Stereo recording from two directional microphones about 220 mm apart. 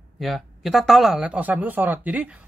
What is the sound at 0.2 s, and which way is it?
A man's voice, centre (ahead or behind).